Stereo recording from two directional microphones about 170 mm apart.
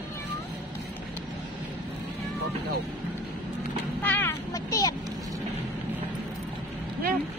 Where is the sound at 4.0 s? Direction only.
10° left (ahead or behind).